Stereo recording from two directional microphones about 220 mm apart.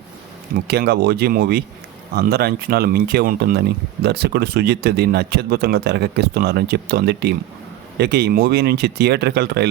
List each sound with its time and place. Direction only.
0.5 s speech: 45° right (ahead or behind)